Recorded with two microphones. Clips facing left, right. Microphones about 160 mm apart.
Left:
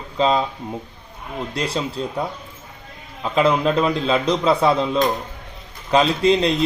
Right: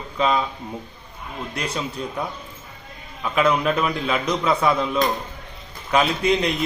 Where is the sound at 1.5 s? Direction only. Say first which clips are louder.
Left 4 dB; 30° left (ahead or behind).